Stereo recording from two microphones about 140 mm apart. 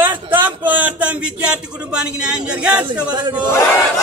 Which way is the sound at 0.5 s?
10° right (ahead or behind).